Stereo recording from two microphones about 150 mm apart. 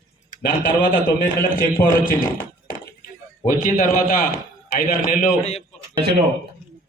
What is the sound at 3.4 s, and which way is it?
Speech, 55° left (ahead or behind).